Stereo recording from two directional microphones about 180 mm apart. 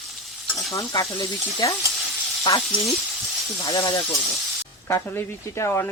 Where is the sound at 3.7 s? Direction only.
20° left (ahead or behind).